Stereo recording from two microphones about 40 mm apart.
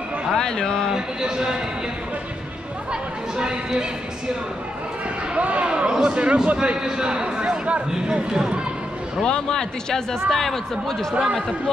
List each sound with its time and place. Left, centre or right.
0.4 s speech: centre
0.9 s speech: centre
2.9 s chatter: centre
5.3 s a sound: right
5.9 s a man's voice: right
9.2 s a man's voice: centre